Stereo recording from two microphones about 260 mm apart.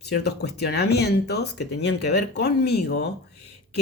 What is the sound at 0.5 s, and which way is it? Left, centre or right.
Speech, left.